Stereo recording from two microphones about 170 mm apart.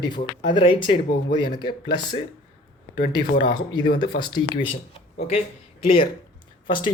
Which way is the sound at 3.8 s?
70° left (ahead or behind).